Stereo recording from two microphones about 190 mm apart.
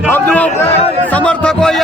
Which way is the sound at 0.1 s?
10° left (ahead or behind).